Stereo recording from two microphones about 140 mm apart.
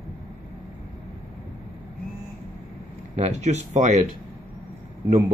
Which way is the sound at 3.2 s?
55° right (ahead or behind).